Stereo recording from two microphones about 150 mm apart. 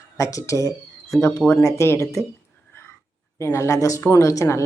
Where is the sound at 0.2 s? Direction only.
20° left (ahead or behind).